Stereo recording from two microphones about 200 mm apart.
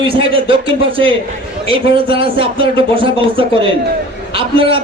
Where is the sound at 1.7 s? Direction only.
25° right (ahead or behind).